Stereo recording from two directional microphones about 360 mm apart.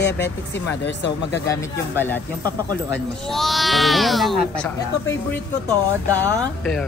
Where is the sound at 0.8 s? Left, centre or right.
Left.